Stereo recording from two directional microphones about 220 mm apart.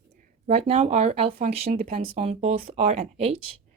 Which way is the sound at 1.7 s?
40° right (ahead or behind).